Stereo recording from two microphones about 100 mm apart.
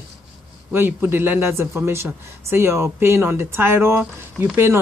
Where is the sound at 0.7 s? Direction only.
20° right (ahead or behind).